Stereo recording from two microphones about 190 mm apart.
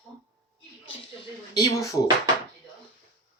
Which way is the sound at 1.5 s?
20° left (ahead or behind).